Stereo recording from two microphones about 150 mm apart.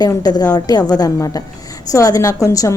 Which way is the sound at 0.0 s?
25° left (ahead or behind).